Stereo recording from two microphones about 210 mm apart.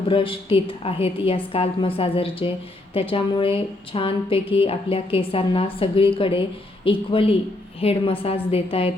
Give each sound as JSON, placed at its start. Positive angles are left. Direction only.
{"t": 0.1, "sound": "speech", "side_deg": 25}